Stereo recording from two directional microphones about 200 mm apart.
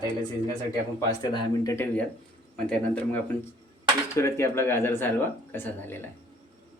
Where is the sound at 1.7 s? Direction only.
10° left (ahead or behind).